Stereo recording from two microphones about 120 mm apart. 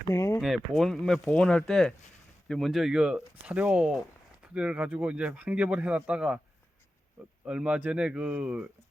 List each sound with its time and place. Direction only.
0.1 s speech: 25° left (ahead or behind)
0.3 s speech: centre (ahead or behind)
7.4 s speech: 10° right (ahead or behind)